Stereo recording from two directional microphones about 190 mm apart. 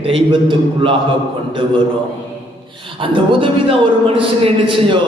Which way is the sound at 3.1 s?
25° right (ahead or behind).